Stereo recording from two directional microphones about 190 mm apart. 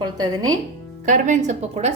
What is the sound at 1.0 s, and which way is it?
Speech, 40° right (ahead or behind).